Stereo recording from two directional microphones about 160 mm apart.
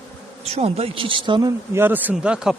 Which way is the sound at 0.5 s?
40° right (ahead or behind).